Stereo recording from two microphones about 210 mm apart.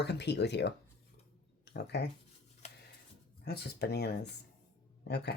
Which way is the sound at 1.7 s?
55° left (ahead or behind).